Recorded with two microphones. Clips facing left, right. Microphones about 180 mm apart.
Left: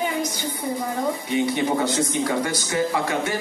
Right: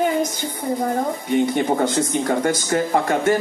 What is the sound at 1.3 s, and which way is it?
Speech, 50° right (ahead or behind).